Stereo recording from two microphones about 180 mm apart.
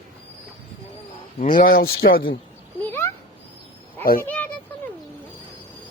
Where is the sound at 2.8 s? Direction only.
10° left (ahead or behind).